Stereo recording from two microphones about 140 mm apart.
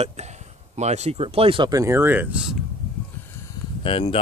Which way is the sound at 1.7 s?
20° right (ahead or behind).